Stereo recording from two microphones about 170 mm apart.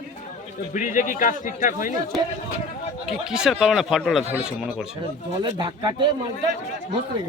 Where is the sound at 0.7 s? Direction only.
50° left (ahead or behind).